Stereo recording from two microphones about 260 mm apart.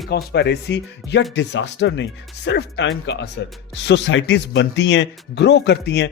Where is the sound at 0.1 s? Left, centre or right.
Left.